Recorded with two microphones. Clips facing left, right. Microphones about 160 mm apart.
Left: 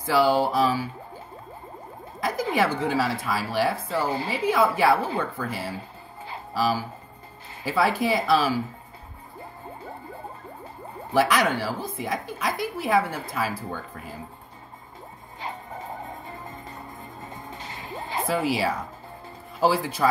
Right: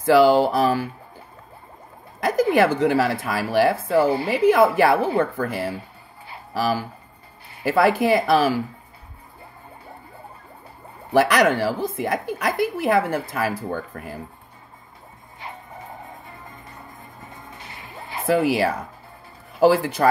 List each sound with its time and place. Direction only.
0.0 s speech: 65° right (ahead or behind)
2.1 s speech: 65° right (ahead or behind)
6.5 s speech: 60° right (ahead or behind)
11.1 s speech: 70° right (ahead or behind)
17.7 s music: 20° left (ahead or behind)
18.3 s speech: 60° right (ahead or behind)